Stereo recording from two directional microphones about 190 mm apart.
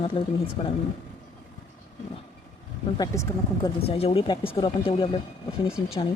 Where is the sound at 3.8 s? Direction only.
30° left (ahead or behind).